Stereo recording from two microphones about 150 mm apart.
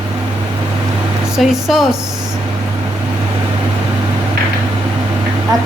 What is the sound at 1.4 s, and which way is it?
Speech, 5° right (ahead or behind).